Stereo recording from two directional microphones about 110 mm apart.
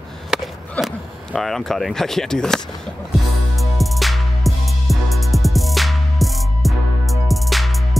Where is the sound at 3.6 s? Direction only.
Centre (ahead or behind).